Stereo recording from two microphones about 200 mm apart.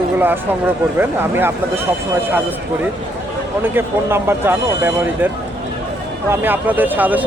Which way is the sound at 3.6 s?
10° right (ahead or behind).